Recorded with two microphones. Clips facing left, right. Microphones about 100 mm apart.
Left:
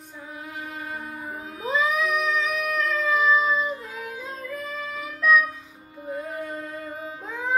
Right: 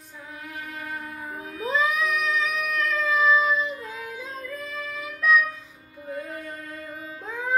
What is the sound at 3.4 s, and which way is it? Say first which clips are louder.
Female singing: even; 25° left (ahead or behind).